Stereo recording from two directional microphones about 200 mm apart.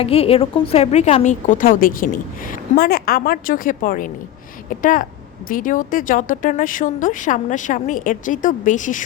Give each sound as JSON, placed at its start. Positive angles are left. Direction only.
{"t": 0.0, "sound": "a woman's voice", "side_deg": 30}